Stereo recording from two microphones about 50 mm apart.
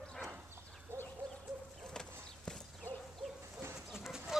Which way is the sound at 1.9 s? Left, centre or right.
Centre.